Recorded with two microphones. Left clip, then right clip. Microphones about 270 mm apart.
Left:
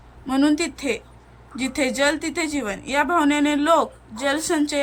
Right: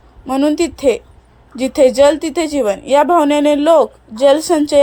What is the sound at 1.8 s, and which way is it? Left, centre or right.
Speech, centre.